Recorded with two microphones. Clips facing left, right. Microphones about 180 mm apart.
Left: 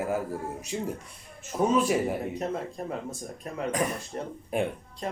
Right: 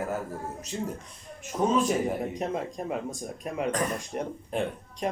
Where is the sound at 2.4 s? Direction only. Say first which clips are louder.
Right 1 dB; 15° right (ahead or behind).